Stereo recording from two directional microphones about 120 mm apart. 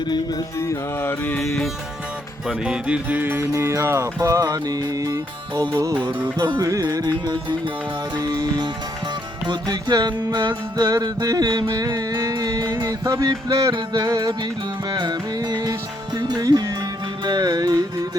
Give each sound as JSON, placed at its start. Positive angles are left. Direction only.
{"t": 0.6, "sound": "music", "side_deg": 20}
{"t": 2.5, "sound": "music", "side_deg": -10}